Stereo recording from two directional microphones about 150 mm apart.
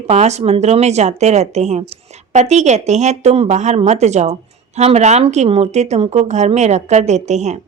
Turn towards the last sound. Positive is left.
turn(degrees=-50)  # may be behind; listen again after turning